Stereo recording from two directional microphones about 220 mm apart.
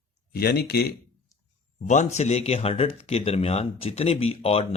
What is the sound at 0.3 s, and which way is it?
Speech, 45° left (ahead or behind).